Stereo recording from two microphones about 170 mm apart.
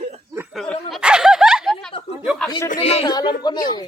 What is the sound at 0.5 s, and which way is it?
Speech, 5° left (ahead or behind).